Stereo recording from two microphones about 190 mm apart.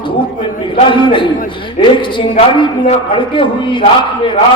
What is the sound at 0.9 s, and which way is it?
A man's voice, 25° left (ahead or behind).